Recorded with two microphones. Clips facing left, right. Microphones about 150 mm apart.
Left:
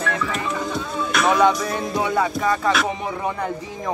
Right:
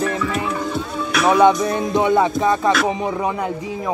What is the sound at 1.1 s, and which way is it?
Music, 5° right (ahead or behind).